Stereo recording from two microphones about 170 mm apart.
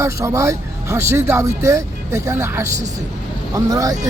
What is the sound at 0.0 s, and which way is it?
Speech, 15° right (ahead or behind).